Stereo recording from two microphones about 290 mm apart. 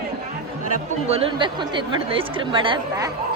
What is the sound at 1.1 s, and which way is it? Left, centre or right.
A woman's voice, centre.